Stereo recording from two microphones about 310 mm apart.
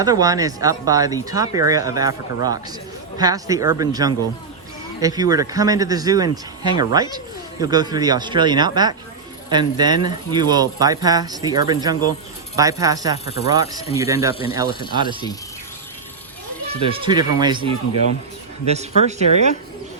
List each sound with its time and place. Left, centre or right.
0.0 s speech: centre
13.2 s speech: left
13.5 s speech: centre
16.6 s speech: centre